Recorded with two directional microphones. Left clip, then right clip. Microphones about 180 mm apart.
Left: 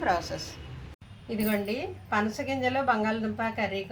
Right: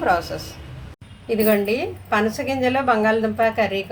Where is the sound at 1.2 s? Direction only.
30° right (ahead or behind).